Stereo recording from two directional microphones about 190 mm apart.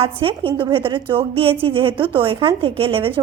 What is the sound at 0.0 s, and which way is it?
A woman's voice, 30° right (ahead or behind).